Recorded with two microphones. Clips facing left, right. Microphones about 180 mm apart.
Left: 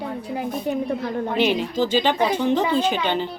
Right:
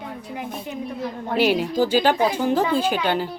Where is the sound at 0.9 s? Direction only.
65° left (ahead or behind).